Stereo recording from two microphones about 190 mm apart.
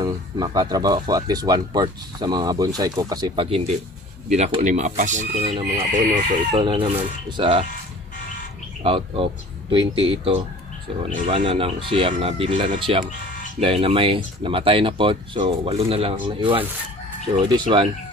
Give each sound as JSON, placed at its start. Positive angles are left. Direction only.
{"t": 0.0, "sound": "speech", "side_deg": -20}
{"t": 8.8, "sound": "speech", "side_deg": -30}